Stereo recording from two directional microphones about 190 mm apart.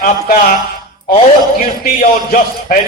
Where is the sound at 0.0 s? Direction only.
50° left (ahead or behind).